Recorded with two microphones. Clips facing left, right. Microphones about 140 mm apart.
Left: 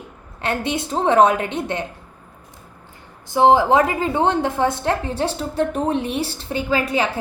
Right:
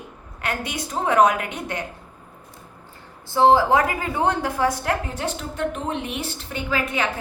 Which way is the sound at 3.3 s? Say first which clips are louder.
Left 2 dB; 20° left (ahead or behind).